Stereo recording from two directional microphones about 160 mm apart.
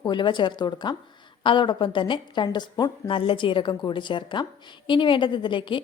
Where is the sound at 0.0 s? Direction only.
30° left (ahead or behind).